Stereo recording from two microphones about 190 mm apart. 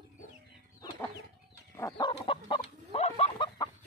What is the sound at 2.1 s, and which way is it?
Chicken, 30° left (ahead or behind).